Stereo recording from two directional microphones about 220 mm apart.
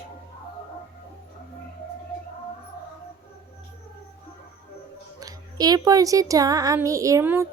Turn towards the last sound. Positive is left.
turn(degrees=-10)  # may be behind; listen again after turning